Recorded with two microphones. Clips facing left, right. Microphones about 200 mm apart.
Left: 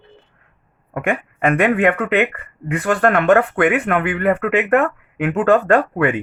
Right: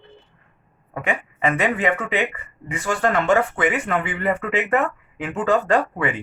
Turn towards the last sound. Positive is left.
turn(degrees=55)  # may be behind; listen again after turning